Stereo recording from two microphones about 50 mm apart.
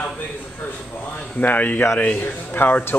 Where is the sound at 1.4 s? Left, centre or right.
Left.